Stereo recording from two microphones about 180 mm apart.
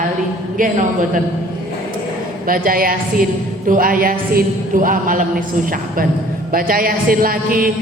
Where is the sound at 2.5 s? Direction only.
50° right (ahead or behind).